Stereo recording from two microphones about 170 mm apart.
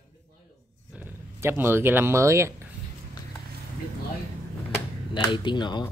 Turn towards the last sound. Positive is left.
turn(degrees=25)  # may be behind; listen again after turning